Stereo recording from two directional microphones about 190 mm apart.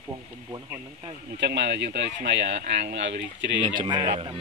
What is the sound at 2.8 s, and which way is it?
Speech, 70° right (ahead or behind).